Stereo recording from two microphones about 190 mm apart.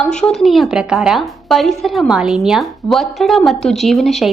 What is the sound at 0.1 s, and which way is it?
Speech, 5° left (ahead or behind).